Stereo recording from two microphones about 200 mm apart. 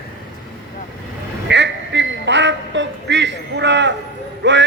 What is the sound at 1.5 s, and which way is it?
A man's voice, 60° right (ahead or behind).